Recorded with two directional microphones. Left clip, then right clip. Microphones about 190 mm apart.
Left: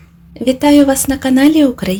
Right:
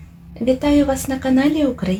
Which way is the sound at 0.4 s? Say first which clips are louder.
Left 6 dB; 45° left (ahead or behind).